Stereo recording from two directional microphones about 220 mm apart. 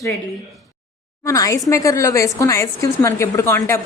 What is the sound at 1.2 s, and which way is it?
A woman's voice, 15° left (ahead or behind).